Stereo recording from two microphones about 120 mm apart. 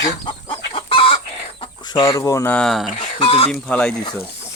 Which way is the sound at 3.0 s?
55° left (ahead or behind).